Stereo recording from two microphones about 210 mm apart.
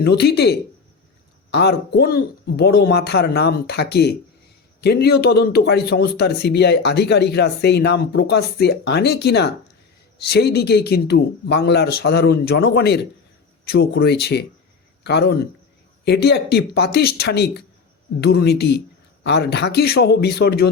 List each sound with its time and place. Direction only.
0.0 s a man's voice: 50° left (ahead or behind)